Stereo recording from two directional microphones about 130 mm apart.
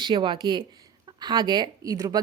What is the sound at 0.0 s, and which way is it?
Speech, 40° right (ahead or behind).